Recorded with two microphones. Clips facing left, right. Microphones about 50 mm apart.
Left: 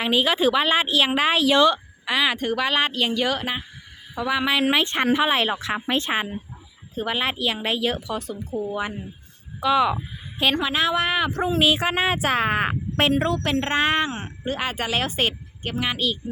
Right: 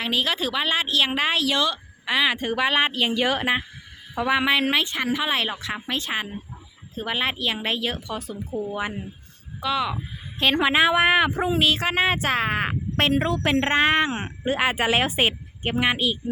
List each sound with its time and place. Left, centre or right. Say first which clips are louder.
0.0 s a woman's voice: left 5 dB; centre
2.0 s a woman's voice: even; centre
4.6 s speech: left 2 dB; centre
4.9 s speech: left 4 dB; left
5.1 s speech: left 4 dB; centre
6.9 s speech: left 1 dB; centre
9.6 s speech: left 5 dB; centre
10.6 s speech: right 4 dB; right
11.6 s speech: left 1 dB; centre
13.1 s a woman's voice: right 1 dB; centre
13.7 s speech: right 1 dB; centre
14.1 s speech: right 3 dB; right